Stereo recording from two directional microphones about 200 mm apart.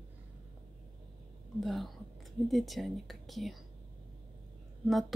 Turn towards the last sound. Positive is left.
turn(degrees=0)  # may be behind; listen again after turning